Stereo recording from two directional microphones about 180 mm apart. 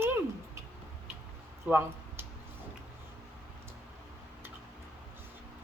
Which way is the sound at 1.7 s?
10° right (ahead or behind).